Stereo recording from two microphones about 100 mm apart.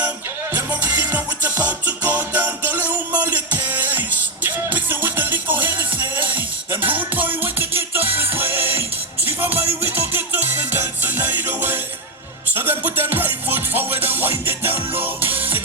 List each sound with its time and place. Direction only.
0.5 s music: 20° right (ahead or behind)